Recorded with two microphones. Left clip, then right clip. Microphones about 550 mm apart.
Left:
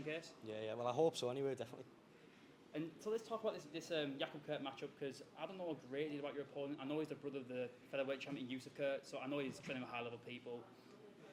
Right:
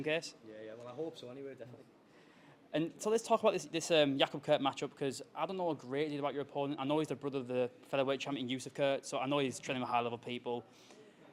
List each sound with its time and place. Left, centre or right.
0.0 s speech: right
0.5 s speech: left
2.7 s speech: right